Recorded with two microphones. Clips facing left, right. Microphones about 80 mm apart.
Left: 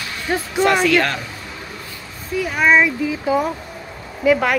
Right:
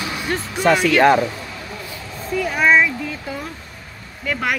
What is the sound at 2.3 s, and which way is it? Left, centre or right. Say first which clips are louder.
Speech: even; centre.